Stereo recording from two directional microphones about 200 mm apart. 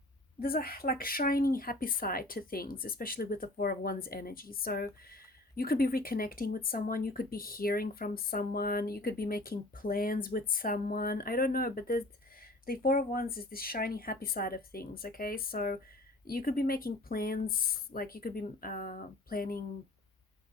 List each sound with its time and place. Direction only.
0.3 s speech: 50° left (ahead or behind)